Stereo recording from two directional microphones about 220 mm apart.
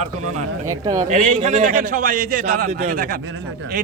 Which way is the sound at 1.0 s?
35° right (ahead or behind).